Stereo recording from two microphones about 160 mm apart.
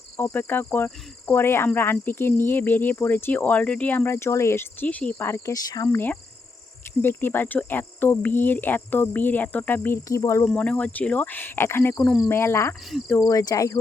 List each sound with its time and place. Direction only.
0.2 s speech: 10° left (ahead or behind)
10.4 s speech: 5° left (ahead or behind); by 13.7 s 25° left (ahead or behind)